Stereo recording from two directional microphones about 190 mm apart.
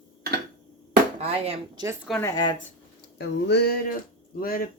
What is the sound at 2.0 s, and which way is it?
Speech, 10° left (ahead or behind).